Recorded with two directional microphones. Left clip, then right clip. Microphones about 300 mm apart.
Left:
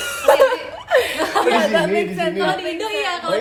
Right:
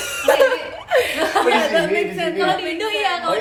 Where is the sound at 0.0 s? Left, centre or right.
Centre.